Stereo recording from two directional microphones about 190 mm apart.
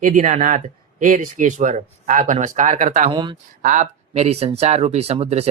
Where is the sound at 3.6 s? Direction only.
40° right (ahead or behind).